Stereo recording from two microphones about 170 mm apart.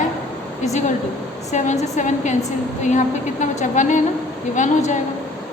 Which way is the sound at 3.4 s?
45° left (ahead or behind).